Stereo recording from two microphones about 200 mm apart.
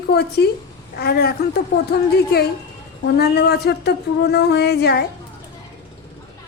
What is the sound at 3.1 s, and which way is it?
A woman's voice, 50° left (ahead or behind).